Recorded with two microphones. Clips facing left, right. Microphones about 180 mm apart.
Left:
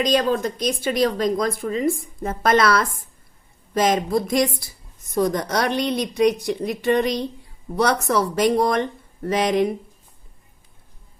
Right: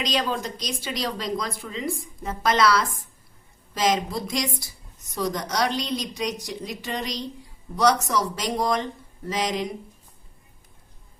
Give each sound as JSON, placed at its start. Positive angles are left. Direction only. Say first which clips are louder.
{"t": 0.0, "sound": "a woman's voice", "louder": "left 7 dB", "side_deg": 50}